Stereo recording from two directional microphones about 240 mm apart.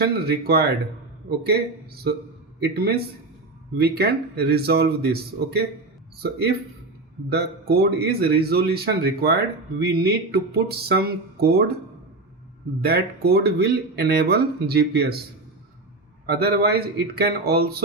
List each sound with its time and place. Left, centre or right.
0.0 s speech: right
2.6 s speech: right
7.3 s speech: right
12.8 s speech: right
16.2 s speech: right